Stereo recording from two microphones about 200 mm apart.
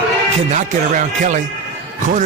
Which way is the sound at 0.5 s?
40° right (ahead or behind).